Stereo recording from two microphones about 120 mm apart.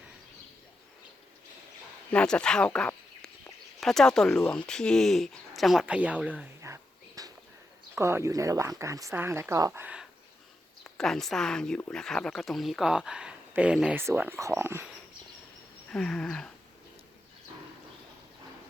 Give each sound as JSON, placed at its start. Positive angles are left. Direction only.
{"t": 2.1, "sound": "speech", "side_deg": 5}
{"t": 5.8, "sound": "speech", "side_deg": -10}
{"t": 7.2, "sound": "a sound", "side_deg": -30}
{"t": 7.9, "sound": "speech", "side_deg": -25}
{"t": 9.8, "sound": "speech", "side_deg": -10}
{"t": 10.8, "sound": "speech", "side_deg": 5}
{"t": 15.9, "sound": "a sound", "side_deg": 5}